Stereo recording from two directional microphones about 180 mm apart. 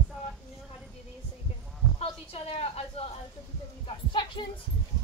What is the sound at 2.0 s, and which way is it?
Speech, 30° left (ahead or behind).